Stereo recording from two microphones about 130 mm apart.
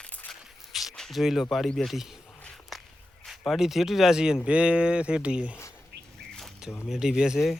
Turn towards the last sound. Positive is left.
turn(degrees=-5)  # may be behind; listen again after turning